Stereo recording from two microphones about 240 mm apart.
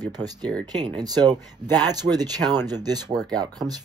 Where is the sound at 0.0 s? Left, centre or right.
Centre.